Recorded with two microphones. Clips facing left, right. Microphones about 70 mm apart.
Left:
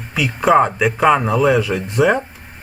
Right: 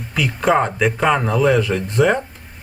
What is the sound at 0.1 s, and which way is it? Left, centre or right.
Speech, centre.